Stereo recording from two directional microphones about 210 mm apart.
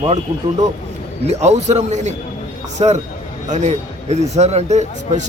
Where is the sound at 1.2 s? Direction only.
30° right (ahead or behind).